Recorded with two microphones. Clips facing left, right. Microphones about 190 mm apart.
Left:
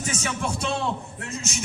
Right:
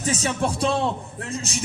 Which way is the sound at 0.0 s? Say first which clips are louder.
Right 5 dB; 35° right (ahead or behind).